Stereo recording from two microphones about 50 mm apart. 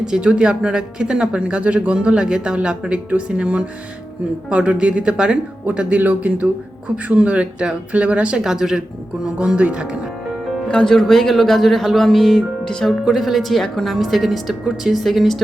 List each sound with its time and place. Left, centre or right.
0.1 s speech: right
5.6 s speech: right
8.4 s speech: centre
10.7 s speech: left
10.9 s speech: centre
12.9 s speech: centre